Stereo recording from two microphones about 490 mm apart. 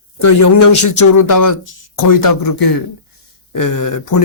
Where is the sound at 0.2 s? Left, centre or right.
Left.